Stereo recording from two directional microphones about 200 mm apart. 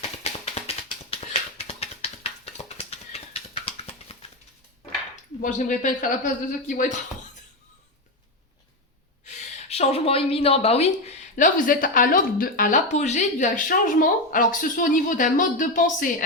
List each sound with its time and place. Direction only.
0.2 s a sound: 30° left (ahead or behind)
5.4 s a woman's voice: 40° left (ahead or behind)
9.2 s a woman's voice: 35° left (ahead or behind)